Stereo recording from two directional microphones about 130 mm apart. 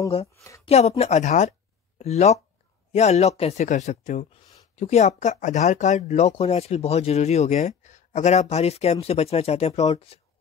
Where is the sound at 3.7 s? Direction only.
65° left (ahead or behind).